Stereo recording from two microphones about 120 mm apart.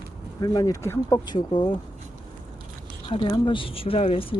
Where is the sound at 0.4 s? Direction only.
30° left (ahead or behind).